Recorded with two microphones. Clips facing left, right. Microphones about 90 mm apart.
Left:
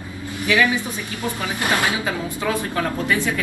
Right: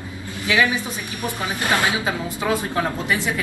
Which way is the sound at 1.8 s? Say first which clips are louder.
Even; 20° right (ahead or behind).